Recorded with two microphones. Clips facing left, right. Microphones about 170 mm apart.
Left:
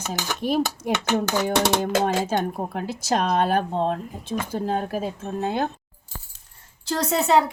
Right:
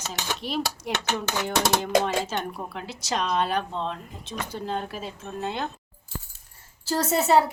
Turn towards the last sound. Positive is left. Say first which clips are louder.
# left 1 dB
turn(degrees=-5)  # may be behind; listen again after turning